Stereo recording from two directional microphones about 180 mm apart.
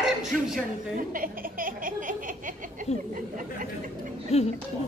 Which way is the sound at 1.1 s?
50° right (ahead or behind).